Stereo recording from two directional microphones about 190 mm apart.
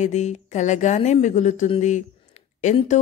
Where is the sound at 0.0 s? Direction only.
40° left (ahead or behind).